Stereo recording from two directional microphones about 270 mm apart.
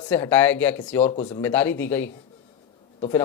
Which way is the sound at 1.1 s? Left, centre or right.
Left.